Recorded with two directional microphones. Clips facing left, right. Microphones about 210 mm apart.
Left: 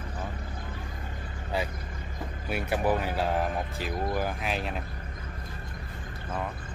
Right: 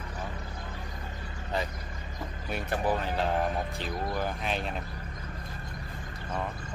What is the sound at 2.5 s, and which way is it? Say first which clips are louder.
Speech: left 3 dB; 10° left (ahead or behind).